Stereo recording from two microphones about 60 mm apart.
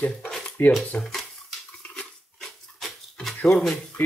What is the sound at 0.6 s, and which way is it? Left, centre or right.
Speech, left.